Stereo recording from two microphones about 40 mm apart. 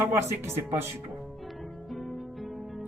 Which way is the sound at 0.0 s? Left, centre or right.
Right.